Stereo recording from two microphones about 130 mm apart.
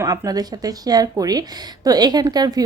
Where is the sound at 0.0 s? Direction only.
25° right (ahead or behind).